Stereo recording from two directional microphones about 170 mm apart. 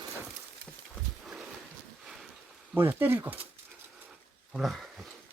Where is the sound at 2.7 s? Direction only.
10° right (ahead or behind).